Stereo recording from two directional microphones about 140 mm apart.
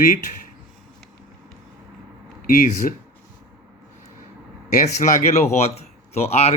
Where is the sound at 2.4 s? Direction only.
90° left.